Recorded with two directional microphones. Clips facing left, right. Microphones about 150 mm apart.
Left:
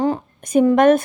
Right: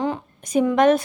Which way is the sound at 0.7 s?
50° left (ahead or behind).